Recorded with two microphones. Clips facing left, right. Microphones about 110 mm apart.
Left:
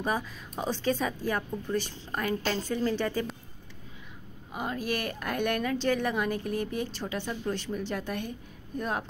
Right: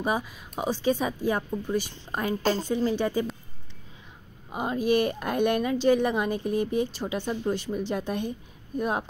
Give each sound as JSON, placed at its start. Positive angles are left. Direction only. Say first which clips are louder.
{"t": 0.0, "sound": "speech", "louder": "right 3 dB", "side_deg": -15}
{"t": 4.5, "sound": "a woman's voice", "louder": "right 7 dB", "side_deg": -20}